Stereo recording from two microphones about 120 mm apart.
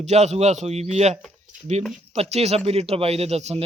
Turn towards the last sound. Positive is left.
turn(degrees=-65)  # may be behind; listen again after turning